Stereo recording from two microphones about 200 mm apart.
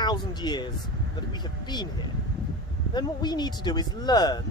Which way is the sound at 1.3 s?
20° left (ahead or behind).